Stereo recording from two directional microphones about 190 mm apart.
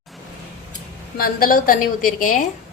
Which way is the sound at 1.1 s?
50° left (ahead or behind).